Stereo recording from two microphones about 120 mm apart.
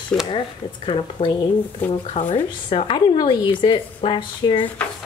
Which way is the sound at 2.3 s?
50° left (ahead or behind).